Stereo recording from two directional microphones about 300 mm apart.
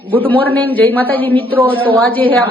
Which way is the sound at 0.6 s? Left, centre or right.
Centre.